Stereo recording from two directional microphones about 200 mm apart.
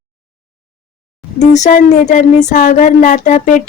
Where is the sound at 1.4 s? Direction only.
35° left (ahead or behind).